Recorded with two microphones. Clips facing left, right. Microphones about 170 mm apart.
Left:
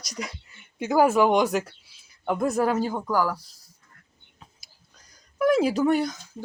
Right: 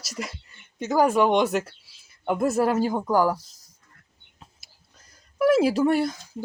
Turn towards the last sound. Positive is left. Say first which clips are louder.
# right 1 dB
turn(degrees=-5)  # may be behind; listen again after turning